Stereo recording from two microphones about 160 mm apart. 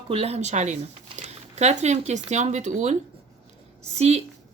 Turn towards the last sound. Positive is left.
turn(degrees=-40)  # may be behind; listen again after turning